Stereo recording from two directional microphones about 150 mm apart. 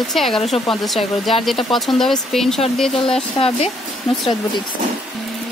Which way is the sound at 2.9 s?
40° left (ahead or behind).